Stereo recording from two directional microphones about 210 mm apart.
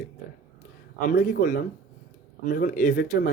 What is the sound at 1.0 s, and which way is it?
Speech, 45° left (ahead or behind).